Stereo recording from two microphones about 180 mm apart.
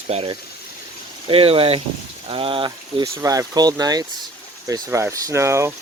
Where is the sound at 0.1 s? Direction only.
35° right (ahead or behind).